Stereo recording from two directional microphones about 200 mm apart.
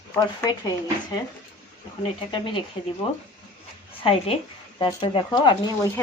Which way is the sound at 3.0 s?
25° left (ahead or behind).